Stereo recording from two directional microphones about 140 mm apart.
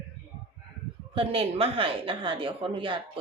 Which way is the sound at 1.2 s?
40° right (ahead or behind).